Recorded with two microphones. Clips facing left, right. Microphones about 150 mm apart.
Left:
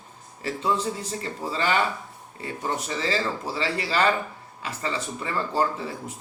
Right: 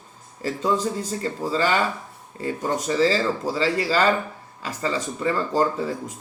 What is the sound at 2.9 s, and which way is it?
Speech, 35° right (ahead or behind).